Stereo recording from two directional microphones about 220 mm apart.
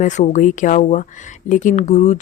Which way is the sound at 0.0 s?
35° left (ahead or behind).